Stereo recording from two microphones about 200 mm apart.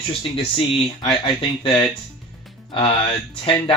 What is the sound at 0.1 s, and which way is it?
Speech, 25° left (ahead or behind).